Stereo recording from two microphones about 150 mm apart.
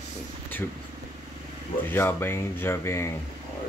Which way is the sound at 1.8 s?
15° left (ahead or behind).